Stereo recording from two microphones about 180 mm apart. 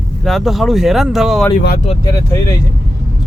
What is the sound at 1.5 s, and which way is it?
Speech, 50° left (ahead or behind).